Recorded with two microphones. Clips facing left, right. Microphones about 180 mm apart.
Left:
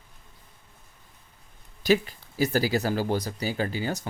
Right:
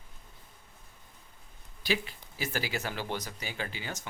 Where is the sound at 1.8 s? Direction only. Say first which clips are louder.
Left 10 dB; 45° left (ahead or behind).